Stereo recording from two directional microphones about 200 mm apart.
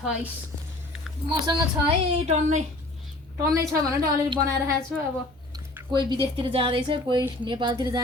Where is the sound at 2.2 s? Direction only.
35° right (ahead or behind).